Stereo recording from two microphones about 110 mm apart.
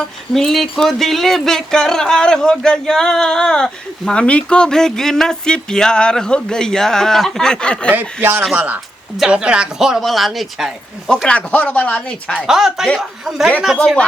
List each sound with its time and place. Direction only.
0.3 s speech: 5° left (ahead or behind)
7.9 s speech: 20° right (ahead or behind); by 12.5 s 10° left (ahead or behind)
12.5 s speech: 5° right (ahead or behind)